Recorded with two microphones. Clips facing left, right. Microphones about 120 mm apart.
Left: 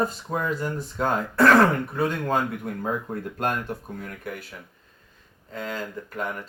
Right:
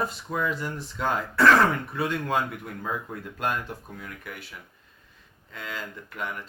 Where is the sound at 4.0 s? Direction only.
50° left (ahead or behind).